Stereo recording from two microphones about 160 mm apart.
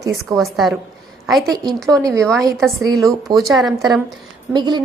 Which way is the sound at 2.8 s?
20° right (ahead or behind).